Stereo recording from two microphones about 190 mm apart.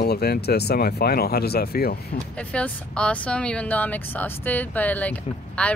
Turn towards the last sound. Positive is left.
turn(degrees=5)  # may be behind; listen again after turning